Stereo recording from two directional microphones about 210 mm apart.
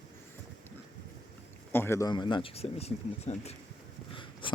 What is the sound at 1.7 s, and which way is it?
Speech, 10° left (ahead or behind).